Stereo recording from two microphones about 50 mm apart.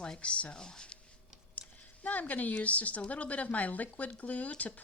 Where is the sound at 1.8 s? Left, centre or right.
Left.